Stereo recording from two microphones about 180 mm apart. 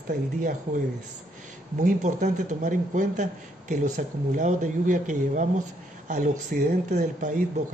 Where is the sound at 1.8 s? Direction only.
45° right (ahead or behind).